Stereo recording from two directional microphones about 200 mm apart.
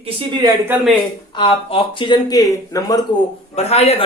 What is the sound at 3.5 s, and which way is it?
Speech, 30° left (ahead or behind).